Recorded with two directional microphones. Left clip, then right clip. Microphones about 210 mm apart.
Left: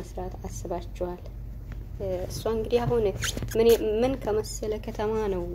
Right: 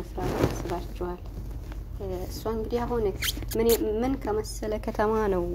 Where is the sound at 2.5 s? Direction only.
20° right (ahead or behind).